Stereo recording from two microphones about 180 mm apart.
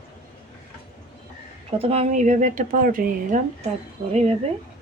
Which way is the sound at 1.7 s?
35° right (ahead or behind).